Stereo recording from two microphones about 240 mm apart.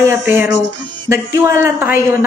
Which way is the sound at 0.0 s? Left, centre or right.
Centre.